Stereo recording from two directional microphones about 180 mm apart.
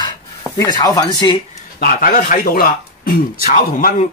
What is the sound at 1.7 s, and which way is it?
Speech, 50° left (ahead or behind).